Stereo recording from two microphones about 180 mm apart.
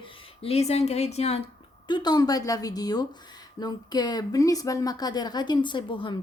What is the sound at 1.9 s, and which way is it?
Speech, 25° left (ahead or behind).